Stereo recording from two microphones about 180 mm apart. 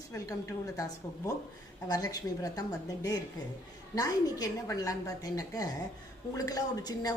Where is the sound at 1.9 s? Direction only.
20° left (ahead or behind).